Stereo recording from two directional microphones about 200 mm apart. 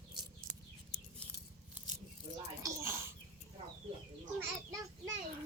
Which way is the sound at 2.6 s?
15° right (ahead or behind).